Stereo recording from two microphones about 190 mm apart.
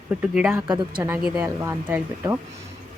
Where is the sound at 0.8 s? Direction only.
20° right (ahead or behind).